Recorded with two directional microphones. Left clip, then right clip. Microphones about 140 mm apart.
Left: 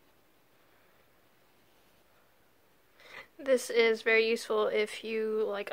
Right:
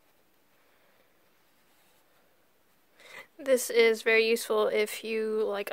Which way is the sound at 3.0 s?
45° right (ahead or behind).